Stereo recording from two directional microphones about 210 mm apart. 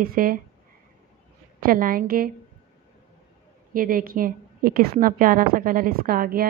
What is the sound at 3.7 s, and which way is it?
A woman's voice, 40° right (ahead or behind).